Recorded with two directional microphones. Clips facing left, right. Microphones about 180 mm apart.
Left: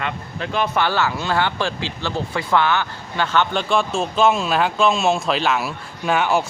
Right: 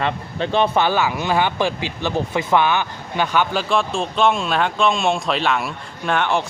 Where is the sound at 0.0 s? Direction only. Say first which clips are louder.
Right 4 dB; 30° right (ahead or behind).